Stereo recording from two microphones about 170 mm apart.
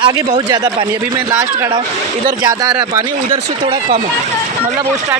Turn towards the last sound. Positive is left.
turn(degrees=-20)  # may be behind; listen again after turning